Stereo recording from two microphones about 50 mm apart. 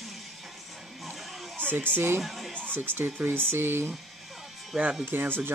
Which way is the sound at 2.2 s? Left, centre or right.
Centre.